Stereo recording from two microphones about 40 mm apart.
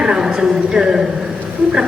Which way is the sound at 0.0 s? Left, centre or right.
Centre.